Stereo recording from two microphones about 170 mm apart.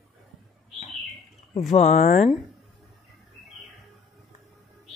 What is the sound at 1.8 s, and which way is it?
Speech, 40° left (ahead or behind).